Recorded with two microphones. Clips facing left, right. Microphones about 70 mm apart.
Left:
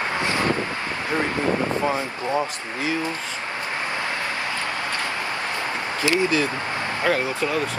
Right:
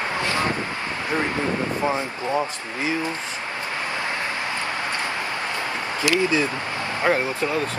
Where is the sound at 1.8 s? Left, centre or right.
Right.